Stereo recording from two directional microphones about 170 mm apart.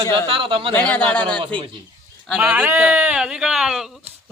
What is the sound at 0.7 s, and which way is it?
Speech, 10° left (ahead or behind).